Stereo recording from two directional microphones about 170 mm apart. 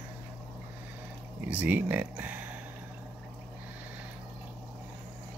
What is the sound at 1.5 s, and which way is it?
Speech, 10° right (ahead or behind).